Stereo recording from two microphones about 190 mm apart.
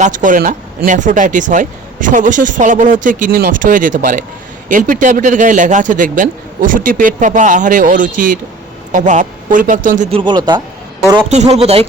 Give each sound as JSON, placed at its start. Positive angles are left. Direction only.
{"t": 0.0, "sound": "a man's voice", "side_deg": -45}
{"t": 11.3, "sound": "a man's voice", "side_deg": -35}